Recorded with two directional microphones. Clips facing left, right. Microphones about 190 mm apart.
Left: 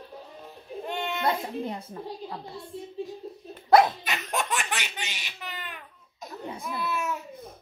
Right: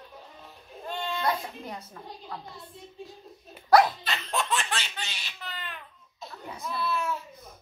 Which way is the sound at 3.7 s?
20° left (ahead or behind).